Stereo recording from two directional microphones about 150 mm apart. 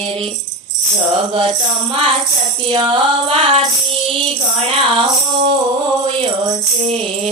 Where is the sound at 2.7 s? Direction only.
30° right (ahead or behind).